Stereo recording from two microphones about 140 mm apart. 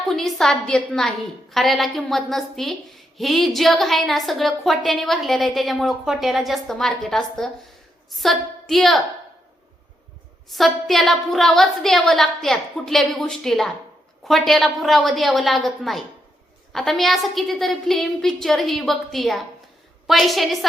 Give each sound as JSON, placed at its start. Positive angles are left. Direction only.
{"t": 0.0, "sound": "a woman's voice", "side_deg": 0}
{"t": 10.5, "sound": "a woman's voice", "side_deg": 0}